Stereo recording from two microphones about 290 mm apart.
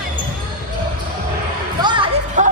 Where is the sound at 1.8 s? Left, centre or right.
Centre.